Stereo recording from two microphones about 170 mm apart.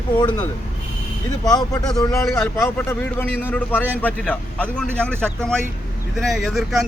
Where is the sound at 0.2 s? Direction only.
25° left (ahead or behind).